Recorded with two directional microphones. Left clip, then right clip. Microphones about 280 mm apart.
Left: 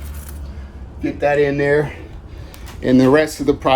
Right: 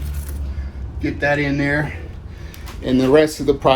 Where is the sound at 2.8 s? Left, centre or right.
Left.